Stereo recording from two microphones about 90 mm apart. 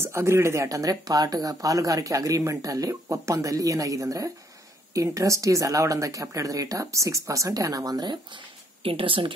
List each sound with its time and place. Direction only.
0.0 s speech: 30° right (ahead or behind); by 9.3 s 80° right